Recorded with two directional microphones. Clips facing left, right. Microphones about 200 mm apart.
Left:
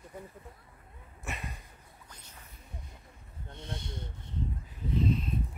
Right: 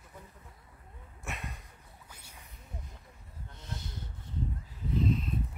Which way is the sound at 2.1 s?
10° right (ahead or behind).